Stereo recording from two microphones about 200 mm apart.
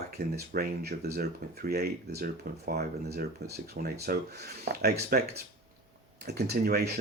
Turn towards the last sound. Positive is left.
turn(degrees=-50)  # may be behind; listen again after turning